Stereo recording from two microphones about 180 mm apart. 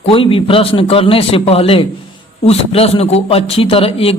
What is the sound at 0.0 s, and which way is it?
A man's voice, 30° left (ahead or behind).